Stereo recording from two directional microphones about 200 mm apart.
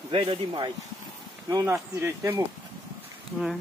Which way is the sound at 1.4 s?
15° right (ahead or behind).